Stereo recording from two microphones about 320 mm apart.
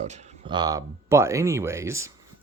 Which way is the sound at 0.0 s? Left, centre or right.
Right.